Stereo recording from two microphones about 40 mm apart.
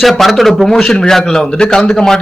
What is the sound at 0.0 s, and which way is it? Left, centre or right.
A man's voice, centre.